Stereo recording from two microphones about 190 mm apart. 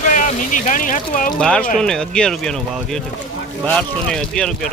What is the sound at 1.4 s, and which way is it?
Speech, 5° left (ahead or behind).